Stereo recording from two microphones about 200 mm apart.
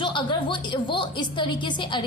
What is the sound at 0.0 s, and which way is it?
A woman's voice, 25° left (ahead or behind).